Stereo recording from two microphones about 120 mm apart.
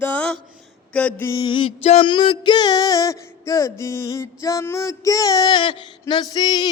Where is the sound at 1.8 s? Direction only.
60° left (ahead or behind).